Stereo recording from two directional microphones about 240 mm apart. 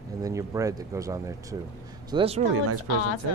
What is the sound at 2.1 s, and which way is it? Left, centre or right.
Speech, right.